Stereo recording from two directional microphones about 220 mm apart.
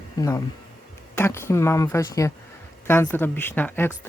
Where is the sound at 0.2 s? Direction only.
15° left (ahead or behind).